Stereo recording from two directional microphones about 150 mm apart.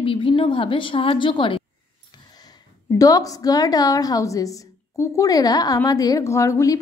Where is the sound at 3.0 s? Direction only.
25° left (ahead or behind).